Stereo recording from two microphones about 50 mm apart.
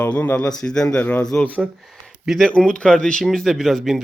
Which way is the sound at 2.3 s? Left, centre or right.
Centre.